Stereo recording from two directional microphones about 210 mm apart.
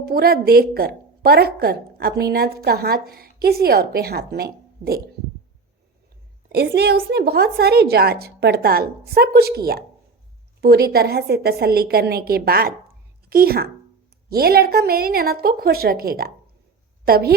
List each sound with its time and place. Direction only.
0.0 s a woman's voice: 45° right (ahead or behind)
6.5 s a woman's voice: 50° right (ahead or behind)